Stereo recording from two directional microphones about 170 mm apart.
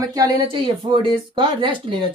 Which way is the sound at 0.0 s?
20° right (ahead or behind).